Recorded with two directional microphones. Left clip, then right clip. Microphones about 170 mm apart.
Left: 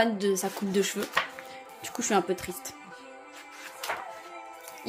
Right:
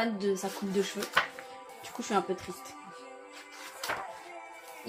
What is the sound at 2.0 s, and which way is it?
Speech, 55° left (ahead or behind).